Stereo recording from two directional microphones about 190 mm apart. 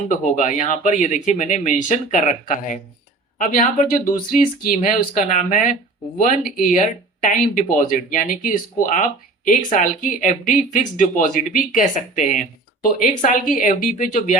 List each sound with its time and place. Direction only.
0.1 s speech: 40° left (ahead or behind)